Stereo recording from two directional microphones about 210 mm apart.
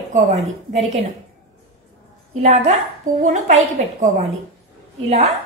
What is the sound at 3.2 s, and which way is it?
A woman's voice, 35° right (ahead or behind).